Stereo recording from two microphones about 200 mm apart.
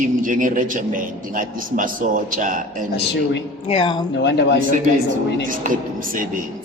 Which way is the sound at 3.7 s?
25° left (ahead or behind).